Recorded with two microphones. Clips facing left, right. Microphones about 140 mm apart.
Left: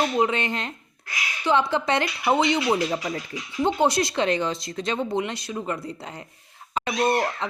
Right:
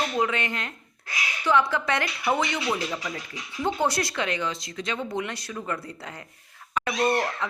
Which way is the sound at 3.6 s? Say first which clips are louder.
Left 4 dB; 20° left (ahead or behind).